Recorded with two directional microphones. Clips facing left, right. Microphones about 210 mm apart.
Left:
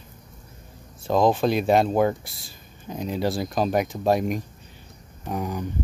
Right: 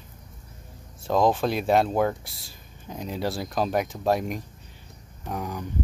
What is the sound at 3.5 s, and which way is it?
Speech, 5° left (ahead or behind).